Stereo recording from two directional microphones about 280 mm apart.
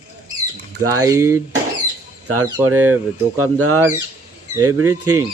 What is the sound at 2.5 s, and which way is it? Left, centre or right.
Speech, centre.